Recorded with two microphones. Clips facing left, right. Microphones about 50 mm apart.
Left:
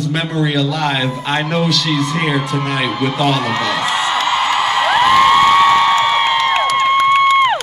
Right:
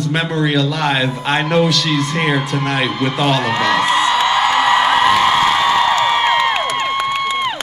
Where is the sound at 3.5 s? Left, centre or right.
Right.